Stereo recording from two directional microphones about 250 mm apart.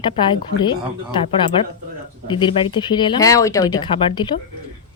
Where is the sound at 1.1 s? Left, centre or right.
Centre.